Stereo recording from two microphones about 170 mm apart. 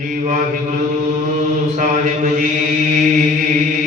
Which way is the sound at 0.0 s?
50° right (ahead or behind).